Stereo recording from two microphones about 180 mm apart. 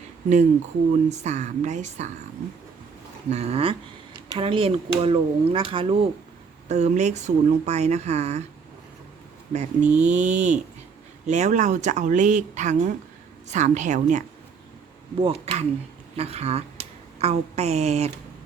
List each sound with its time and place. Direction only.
1.1 s speech: 40° right (ahead or behind)
3.2 s speech: 35° right (ahead or behind)
9.5 s speech: 40° right (ahead or behind)
15.2 s a woman's voice: 30° right (ahead or behind)